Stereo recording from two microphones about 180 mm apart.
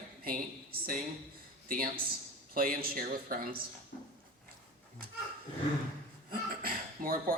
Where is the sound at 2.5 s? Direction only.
55° right (ahead or behind).